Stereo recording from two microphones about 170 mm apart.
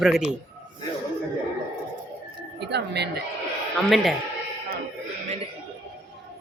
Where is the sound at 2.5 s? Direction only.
80° right.